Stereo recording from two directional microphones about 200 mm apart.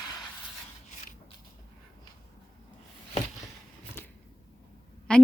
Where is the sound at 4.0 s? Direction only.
10° left (ahead or behind).